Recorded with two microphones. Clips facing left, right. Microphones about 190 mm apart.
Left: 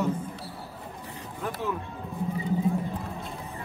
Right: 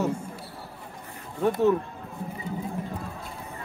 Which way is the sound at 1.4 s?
30° right (ahead or behind).